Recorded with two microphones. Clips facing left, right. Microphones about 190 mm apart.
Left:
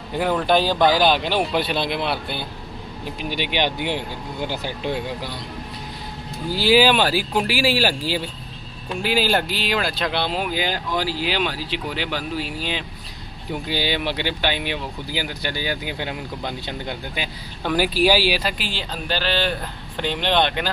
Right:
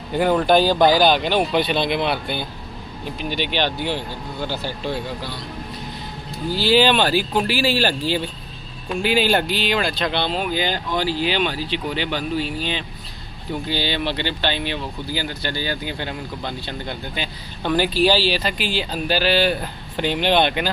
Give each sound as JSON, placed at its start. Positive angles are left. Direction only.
{"t": 0.1, "sound": "speech", "side_deg": 0}
{"t": 6.5, "sound": "speech", "side_deg": 10}